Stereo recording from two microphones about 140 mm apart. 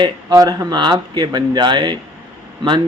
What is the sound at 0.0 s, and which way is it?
Speech, 30° right (ahead or behind).